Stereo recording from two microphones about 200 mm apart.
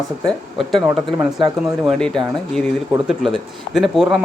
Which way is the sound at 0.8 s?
20° right (ahead or behind).